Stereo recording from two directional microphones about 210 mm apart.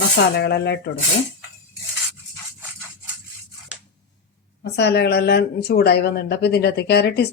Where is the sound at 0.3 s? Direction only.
50° left (ahead or behind).